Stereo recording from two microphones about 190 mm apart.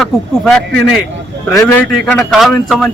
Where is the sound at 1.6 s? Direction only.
15° left (ahead or behind).